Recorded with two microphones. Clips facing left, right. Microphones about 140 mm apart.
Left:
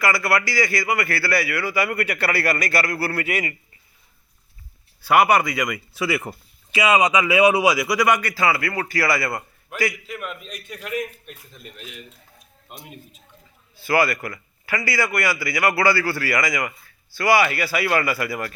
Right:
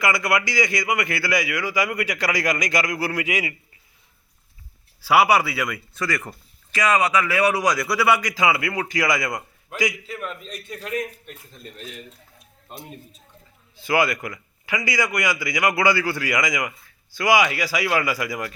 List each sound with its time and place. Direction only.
0.0 s a man's voice: 20° right (ahead or behind)
5.0 s speech: 10° right (ahead or behind)
10.4 s a man's voice: 30° right (ahead or behind)
13.7 s a man's voice: 15° right (ahead or behind)